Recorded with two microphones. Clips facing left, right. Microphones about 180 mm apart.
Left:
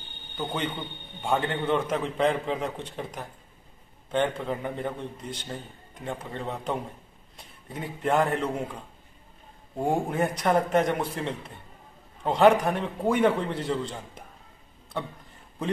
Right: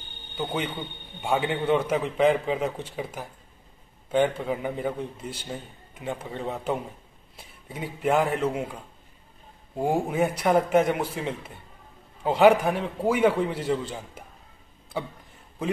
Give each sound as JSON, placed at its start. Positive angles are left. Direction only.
{"t": 1.2, "sound": "a man's voice", "side_deg": -5}
{"t": 9.8, "sound": "a man's voice", "side_deg": -5}